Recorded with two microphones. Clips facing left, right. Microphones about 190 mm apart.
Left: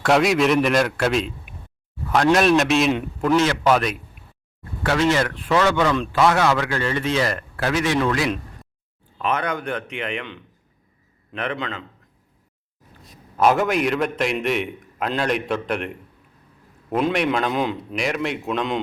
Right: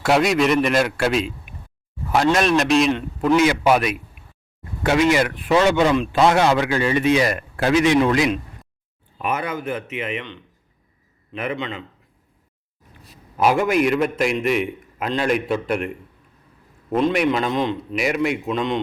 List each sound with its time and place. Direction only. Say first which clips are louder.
0.0 s a man's voice: even; centre (ahead or behind)
11.3 s speech: right 1 dB; 5° right (ahead or behind)
13.3 s a man's voice: right 1 dB; 10° right (ahead or behind)
17.9 s a man's voice: right 5 dB; 5° right (ahead or behind)